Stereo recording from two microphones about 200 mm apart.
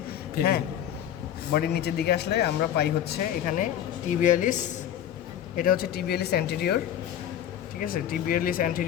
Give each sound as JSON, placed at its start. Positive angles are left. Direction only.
{"t": 1.5, "sound": "speech", "side_deg": 55}
{"t": 5.5, "sound": "speech", "side_deg": 45}
{"t": 7.8, "sound": "speech", "side_deg": 45}